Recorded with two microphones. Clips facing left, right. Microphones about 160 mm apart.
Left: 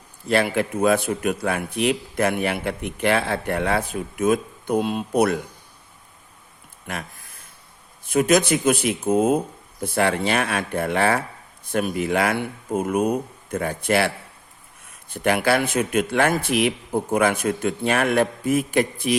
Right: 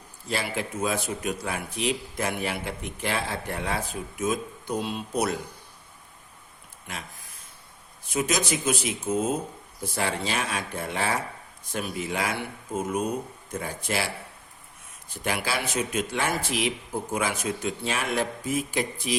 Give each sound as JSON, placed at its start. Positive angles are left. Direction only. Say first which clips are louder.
{"t": 0.3, "sound": "speech", "louder": "left 9 dB", "side_deg": 60}
{"t": 6.8, "sound": "a sound", "louder": "left 7 dB", "side_deg": 55}
{"t": 8.0, "sound": "speech", "louder": "left 9 dB", "side_deg": 55}
{"t": 15.1, "sound": "speech", "louder": "left 9 dB", "side_deg": 55}